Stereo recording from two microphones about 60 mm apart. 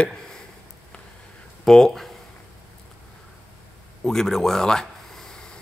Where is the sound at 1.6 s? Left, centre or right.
Centre.